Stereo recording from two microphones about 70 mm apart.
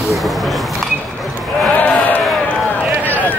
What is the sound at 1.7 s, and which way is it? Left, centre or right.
Sheep, left.